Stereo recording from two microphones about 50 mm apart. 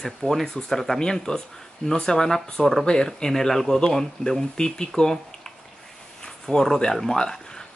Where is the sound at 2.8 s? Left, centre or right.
Centre.